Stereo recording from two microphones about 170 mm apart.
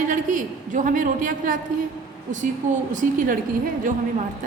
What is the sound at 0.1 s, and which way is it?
A woman's voice, 50° right (ahead or behind).